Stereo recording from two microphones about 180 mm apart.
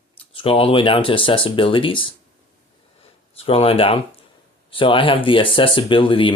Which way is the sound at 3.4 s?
30° left (ahead or behind).